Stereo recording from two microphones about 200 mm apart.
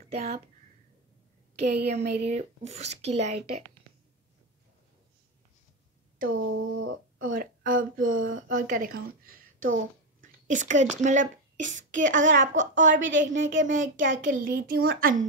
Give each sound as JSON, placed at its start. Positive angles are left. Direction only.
{"t": 0.1, "sound": "speech", "side_deg": -30}
{"t": 2.0, "sound": "speech", "side_deg": -35}
{"t": 6.2, "sound": "a sound", "side_deg": -85}
{"t": 7.2, "sound": "a woman's voice", "side_deg": -45}
{"t": 12.3, "sound": "a woman's voice", "side_deg": -65}
{"t": 13.7, "sound": "speech", "side_deg": -40}